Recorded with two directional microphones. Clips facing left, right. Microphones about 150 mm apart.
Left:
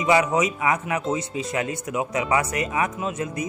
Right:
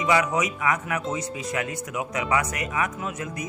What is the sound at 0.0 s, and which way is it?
Speech, 25° left (ahead or behind).